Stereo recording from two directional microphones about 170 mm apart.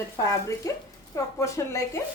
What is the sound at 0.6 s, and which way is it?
A woman's voice, 20° left (ahead or behind).